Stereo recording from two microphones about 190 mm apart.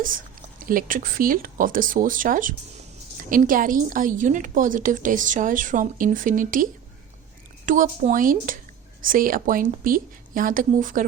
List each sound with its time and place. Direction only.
0.6 s a woman's voice: 45° right (ahead or behind)